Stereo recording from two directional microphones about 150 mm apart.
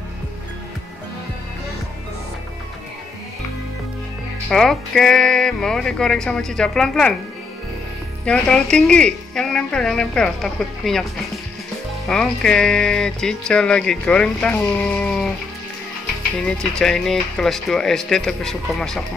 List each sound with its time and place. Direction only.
4.5 s speech: 5° left (ahead or behind)
8.3 s speech: 5° left (ahead or behind)
12.1 s speech: 5° left (ahead or behind)
16.4 s speech: 5° left (ahead or behind)